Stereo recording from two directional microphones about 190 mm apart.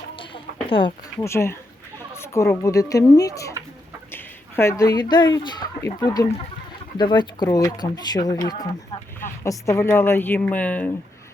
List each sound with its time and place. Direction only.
0.7 s speech: 25° left (ahead or behind)
1.2 s speech: 15° left (ahead or behind)